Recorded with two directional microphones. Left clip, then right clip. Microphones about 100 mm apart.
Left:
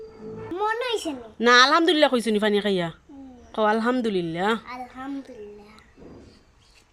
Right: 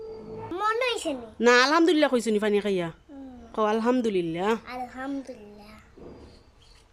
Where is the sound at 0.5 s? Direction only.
25° right (ahead or behind).